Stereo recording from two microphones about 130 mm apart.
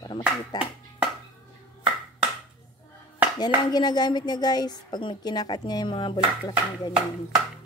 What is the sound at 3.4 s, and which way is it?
A woman's voice, 30° left (ahead or behind).